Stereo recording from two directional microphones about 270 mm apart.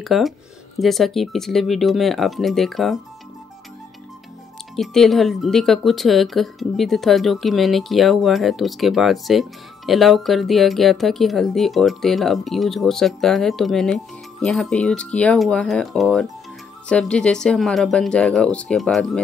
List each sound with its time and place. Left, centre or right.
0.0 s speech: centre
4.7 s speech: centre